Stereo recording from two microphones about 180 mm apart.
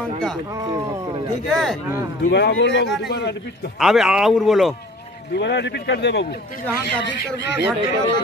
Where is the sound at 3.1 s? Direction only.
70° left (ahead or behind).